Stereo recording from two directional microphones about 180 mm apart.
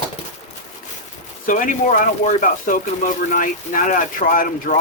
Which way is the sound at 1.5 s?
45° left (ahead or behind).